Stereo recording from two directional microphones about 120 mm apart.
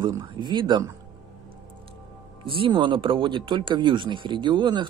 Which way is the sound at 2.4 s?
45° right (ahead or behind).